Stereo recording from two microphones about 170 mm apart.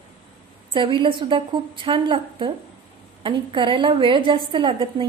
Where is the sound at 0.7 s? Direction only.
30° right (ahead or behind).